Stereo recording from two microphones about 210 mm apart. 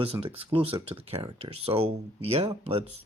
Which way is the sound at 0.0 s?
25° right (ahead or behind).